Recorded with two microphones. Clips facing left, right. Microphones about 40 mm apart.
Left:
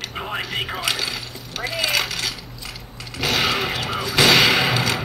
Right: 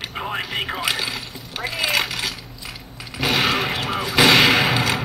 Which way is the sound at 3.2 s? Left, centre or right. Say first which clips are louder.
Right 1 dB; centre.